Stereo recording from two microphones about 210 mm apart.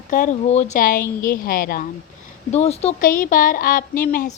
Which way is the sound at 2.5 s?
30° left (ahead or behind).